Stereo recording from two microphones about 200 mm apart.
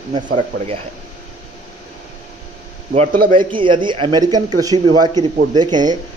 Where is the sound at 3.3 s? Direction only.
25° right (ahead or behind).